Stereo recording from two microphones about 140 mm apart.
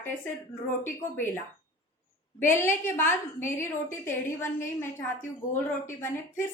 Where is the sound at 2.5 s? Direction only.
15° left (ahead or behind).